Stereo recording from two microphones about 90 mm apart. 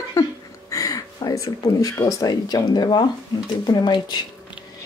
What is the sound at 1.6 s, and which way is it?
Speech, 40° left (ahead or behind).